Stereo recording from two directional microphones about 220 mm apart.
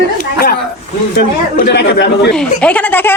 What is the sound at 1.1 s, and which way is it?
Speech, 45° left (ahead or behind).